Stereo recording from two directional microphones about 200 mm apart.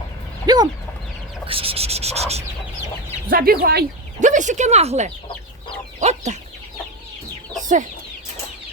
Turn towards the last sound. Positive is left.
turn(degrees=-40)  # may be behind; listen again after turning